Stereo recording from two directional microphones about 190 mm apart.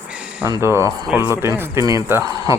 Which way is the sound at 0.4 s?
15° right (ahead or behind).